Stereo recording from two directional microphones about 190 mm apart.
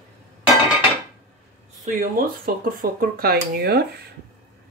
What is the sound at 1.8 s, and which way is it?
Speech, 50° right (ahead or behind).